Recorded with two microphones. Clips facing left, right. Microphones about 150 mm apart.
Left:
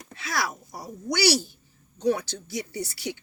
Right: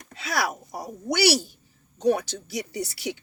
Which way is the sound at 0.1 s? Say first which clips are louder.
Right 3 dB; 25° right (ahead or behind).